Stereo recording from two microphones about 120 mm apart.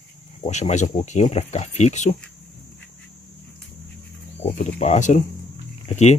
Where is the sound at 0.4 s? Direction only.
70° left (ahead or behind).